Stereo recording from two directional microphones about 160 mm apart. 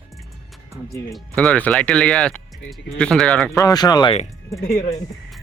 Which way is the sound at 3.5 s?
25° left (ahead or behind).